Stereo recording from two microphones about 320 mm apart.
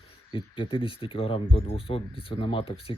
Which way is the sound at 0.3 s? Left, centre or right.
Centre.